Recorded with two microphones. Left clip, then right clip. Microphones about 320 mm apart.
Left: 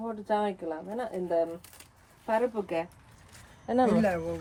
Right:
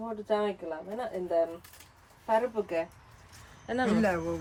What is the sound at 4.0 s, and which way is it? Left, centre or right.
Speech, centre.